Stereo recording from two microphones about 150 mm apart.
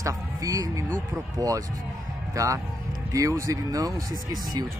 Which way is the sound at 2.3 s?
20° right (ahead or behind).